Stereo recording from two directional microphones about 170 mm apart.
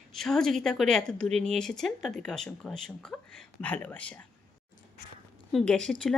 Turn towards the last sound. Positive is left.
turn(degrees=5)  # may be behind; listen again after turning